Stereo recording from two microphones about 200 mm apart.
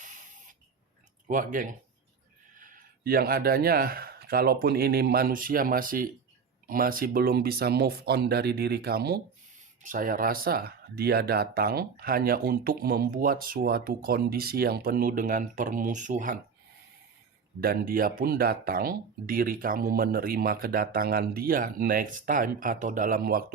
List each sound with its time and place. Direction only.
0.0 s a sound: 40° right (ahead or behind)
1.3 s speech: 40° right (ahead or behind)
17.6 s speech: 45° right (ahead or behind)